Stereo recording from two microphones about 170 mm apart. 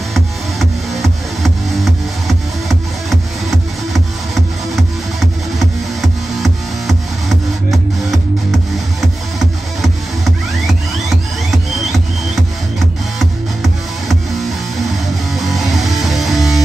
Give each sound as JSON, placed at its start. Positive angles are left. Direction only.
{"t": 0.1, "sound": "music", "side_deg": 0}
{"t": 10.7, "sound": "music", "side_deg": 0}
{"t": 13.2, "sound": "music", "side_deg": 0}
{"t": 15.3, "sound": "music", "side_deg": 0}